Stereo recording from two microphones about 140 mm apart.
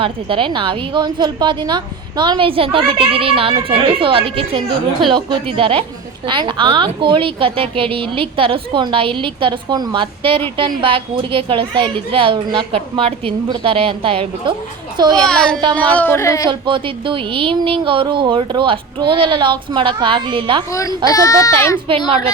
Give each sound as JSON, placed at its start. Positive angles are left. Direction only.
{"t": 0.0, "sound": "a woman's voice", "side_deg": -40}
{"t": 15.3, "sound": "a woman's voice", "side_deg": 5}
{"t": 16.5, "sound": "a woman's voice", "side_deg": -35}
{"t": 20.7, "sound": "speech", "side_deg": 25}
{"t": 21.8, "sound": "a woman's voice", "side_deg": -40}